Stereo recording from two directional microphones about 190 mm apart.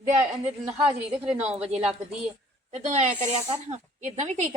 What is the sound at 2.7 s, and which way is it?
Speech, 35° right (ahead or behind).